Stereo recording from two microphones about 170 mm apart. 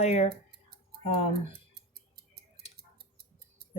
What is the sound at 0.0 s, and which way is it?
Speech, 40° left (ahead or behind).